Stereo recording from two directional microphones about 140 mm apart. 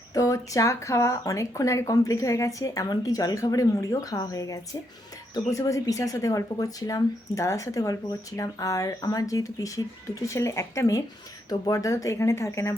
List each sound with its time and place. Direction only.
0.1 s speech: 25° left (ahead or behind)